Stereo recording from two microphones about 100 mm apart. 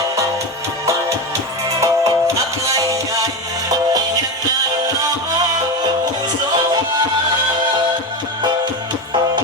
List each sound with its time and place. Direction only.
1.8 s music: 35° right (ahead or behind)